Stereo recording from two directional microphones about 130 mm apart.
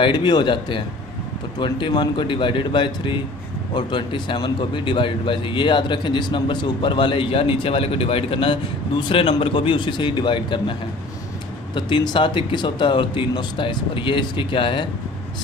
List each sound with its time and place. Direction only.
0.0 s speech: 35° left (ahead or behind)